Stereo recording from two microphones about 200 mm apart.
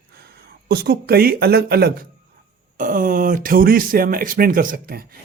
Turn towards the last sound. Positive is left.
turn(degrees=-45)  # may be behind; listen again after turning